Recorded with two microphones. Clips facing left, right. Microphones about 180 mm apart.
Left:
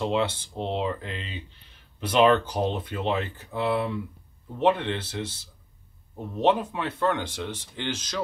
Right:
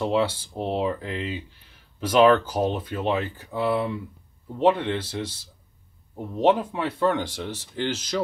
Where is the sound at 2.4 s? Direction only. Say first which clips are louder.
Right 2 dB; 10° right (ahead or behind).